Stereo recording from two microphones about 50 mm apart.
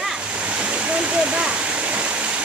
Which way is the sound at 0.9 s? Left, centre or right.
Right.